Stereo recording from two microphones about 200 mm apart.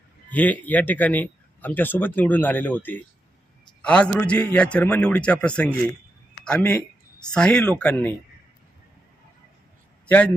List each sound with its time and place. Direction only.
0.3 s a man's voice: 10° left (ahead or behind)